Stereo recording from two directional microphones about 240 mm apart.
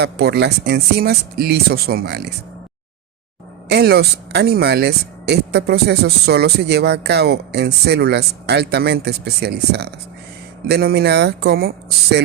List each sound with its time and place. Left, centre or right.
0.0 s speech: right
3.7 s speech: right